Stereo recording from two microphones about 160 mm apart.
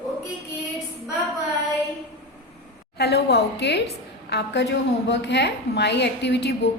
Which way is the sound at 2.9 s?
90° left.